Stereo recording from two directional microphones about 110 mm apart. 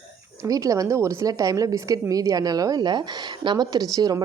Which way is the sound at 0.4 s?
30° right (ahead or behind).